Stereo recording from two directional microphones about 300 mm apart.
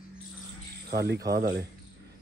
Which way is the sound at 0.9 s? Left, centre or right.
Right.